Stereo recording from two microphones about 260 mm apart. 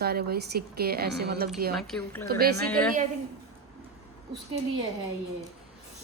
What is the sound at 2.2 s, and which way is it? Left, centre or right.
Speech, right.